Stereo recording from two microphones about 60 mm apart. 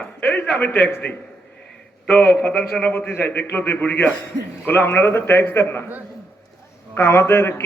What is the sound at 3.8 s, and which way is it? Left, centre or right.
Speech, left.